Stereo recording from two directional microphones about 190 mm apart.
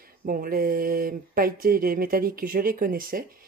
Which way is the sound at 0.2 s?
50° right (ahead or behind).